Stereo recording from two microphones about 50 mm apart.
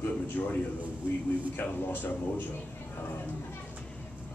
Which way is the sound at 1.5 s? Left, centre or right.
Left.